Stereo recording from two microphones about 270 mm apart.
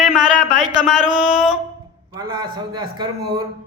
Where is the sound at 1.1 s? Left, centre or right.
Centre.